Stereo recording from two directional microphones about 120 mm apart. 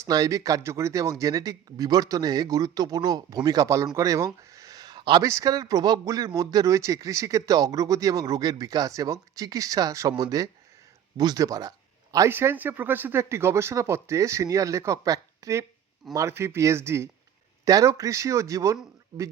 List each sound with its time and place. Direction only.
0.0 s a man's voice: 30° right (ahead or behind)
4.5 s a sound: 30° right (ahead or behind)
5.2 s a man's voice: 25° right (ahead or behind)
12.3 s a man's voice: 20° right (ahead or behind)